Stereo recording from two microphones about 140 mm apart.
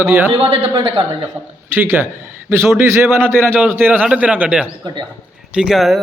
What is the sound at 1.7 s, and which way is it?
A man's voice, 15° right (ahead or behind).